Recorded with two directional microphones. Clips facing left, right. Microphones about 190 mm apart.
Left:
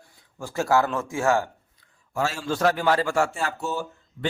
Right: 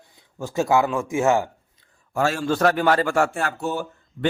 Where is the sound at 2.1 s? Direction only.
55° right (ahead or behind).